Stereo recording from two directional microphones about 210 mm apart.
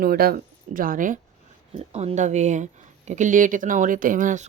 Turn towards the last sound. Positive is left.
turn(degrees=-40)  # may be behind; listen again after turning